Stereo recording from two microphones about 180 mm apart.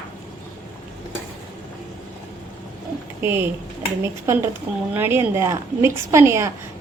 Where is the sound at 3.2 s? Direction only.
10° right (ahead or behind).